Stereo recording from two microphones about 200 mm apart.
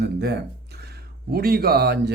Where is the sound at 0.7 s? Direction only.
55° right (ahead or behind).